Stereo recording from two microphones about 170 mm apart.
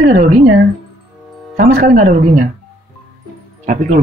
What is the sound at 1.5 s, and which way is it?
Speech, 55° right (ahead or behind).